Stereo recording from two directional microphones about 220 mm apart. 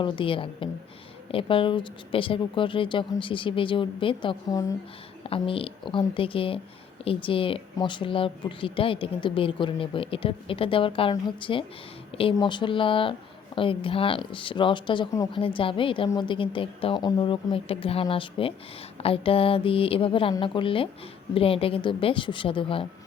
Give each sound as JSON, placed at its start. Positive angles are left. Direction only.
{"t": 0.0, "sound": "speech", "side_deg": 25}